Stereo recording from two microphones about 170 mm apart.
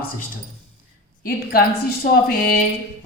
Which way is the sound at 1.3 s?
65° left (ahead or behind).